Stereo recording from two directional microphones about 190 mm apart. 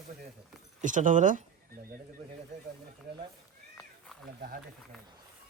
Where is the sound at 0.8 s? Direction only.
40° right (ahead or behind).